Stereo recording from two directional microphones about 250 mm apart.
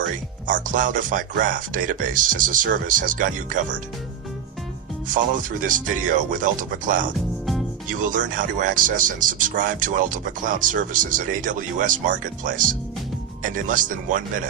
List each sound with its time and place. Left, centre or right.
0.4 s speech: right
5.0 s speech: right